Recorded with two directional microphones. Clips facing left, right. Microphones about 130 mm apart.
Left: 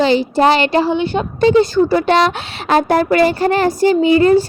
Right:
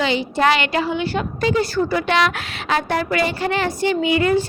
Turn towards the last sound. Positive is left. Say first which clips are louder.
# left 7 dB
turn(degrees=35)  # may be behind; listen again after turning